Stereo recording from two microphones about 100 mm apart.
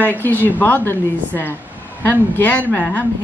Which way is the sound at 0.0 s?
20° left (ahead or behind).